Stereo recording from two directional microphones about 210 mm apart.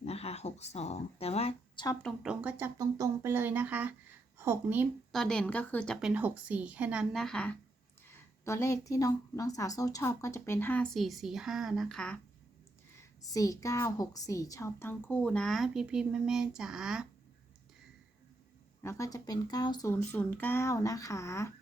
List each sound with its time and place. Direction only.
0.0 s a woman's voice: 30° left (ahead or behind)
2.0 s a woman's voice: centre (ahead or behind)
5.2 s a woman's voice: 5° left (ahead or behind)
13.0 s speech: 15° left (ahead or behind); by 17.1 s 5° right (ahead or behind)
18.8 s speech: 15° left (ahead or behind)